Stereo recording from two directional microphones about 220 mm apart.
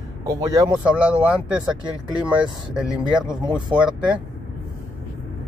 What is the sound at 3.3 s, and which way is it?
Speech, 20° right (ahead or behind).